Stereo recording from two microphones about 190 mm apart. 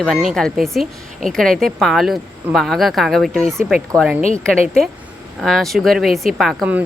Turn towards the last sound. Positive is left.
turn(degrees=-5)  # may be behind; listen again after turning